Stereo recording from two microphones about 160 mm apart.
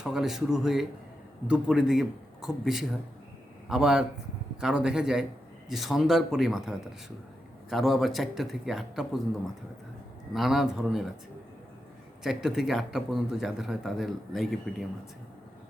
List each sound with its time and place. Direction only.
0.0 s a man's voice: 5° right (ahead or behind)
10.3 s a man's voice: centre (ahead or behind)
12.2 s a man's voice: 5° right (ahead or behind)